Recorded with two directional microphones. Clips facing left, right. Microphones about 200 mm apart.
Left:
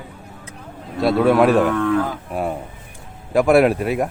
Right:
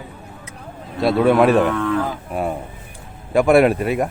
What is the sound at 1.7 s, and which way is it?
Livestock, 45° left (ahead or behind).